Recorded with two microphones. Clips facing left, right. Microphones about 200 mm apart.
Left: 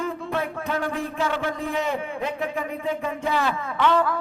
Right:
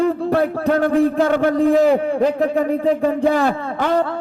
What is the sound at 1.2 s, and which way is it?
A man's voice, 45° right (ahead or behind).